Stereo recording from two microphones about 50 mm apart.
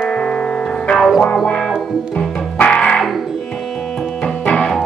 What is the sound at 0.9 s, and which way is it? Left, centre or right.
Music, centre.